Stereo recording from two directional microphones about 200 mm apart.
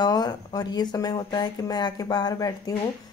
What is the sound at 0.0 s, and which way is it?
A woman's voice, 20° left (ahead or behind).